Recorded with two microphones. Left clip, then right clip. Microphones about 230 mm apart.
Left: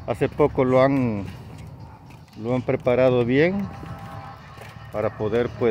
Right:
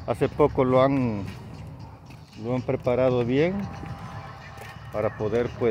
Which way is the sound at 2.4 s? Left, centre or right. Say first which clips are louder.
Left 4 dB; left.